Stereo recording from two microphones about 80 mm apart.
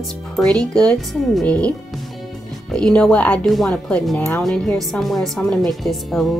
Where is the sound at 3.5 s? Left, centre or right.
Centre.